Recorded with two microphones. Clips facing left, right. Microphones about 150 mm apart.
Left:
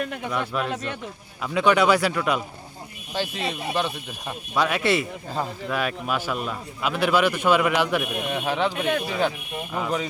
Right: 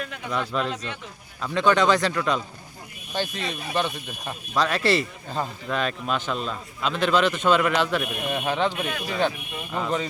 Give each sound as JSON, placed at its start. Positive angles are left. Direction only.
{"t": 0.3, "sound": "speech", "side_deg": 5}
{"t": 0.7, "sound": "speech", "side_deg": 50}
{"t": 1.4, "sound": "speech", "side_deg": 10}
{"t": 3.4, "sound": "speech", "side_deg": 25}
{"t": 3.8, "sound": "speech", "side_deg": 0}
{"t": 8.2, "sound": "speech", "side_deg": 0}